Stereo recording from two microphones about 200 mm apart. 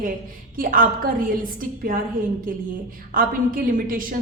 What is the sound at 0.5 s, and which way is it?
Speech, 45° right (ahead or behind).